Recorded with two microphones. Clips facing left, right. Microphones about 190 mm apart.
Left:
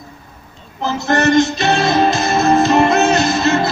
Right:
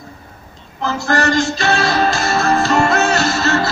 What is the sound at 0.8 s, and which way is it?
Music, 20° left (ahead or behind).